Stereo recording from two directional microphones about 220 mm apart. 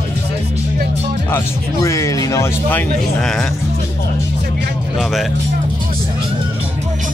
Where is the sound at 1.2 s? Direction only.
10° left (ahead or behind).